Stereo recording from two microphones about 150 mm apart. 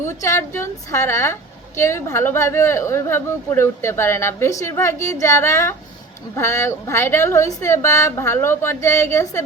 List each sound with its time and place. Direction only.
0.0 s a woman's voice: 20° left (ahead or behind)